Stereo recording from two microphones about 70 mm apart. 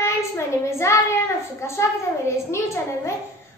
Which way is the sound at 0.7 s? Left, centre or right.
Left.